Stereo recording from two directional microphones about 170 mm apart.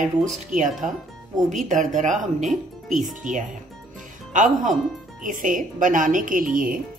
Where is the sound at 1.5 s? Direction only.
45° right (ahead or behind).